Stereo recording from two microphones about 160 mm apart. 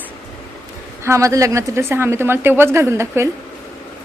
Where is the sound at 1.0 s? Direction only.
20° right (ahead or behind).